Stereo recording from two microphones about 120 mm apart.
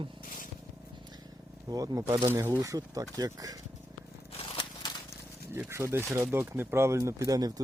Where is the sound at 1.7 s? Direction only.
30° right (ahead or behind).